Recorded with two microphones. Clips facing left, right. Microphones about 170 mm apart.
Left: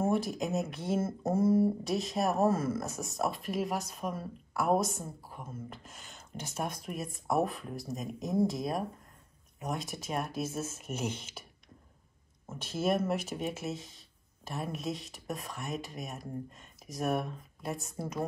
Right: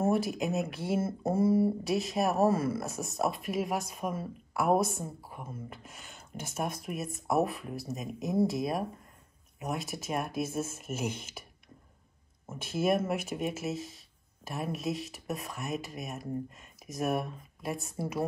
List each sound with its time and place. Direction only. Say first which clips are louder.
0.0 s speech: right 2 dB; 5° right (ahead or behind)
4.7 s speech: right 2 dB; 60° right (ahead or behind)
5.3 s speech: right 1 dB; 10° right (ahead or behind)
12.7 s speech: right 1 dB; 10° right (ahead or behind)